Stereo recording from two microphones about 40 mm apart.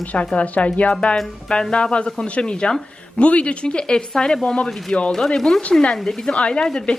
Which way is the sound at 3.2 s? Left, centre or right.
Left.